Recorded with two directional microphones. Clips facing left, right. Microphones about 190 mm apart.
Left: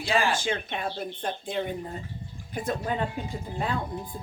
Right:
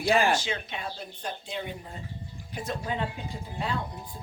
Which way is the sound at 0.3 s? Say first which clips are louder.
Left 3 dB; 50° left (ahead or behind).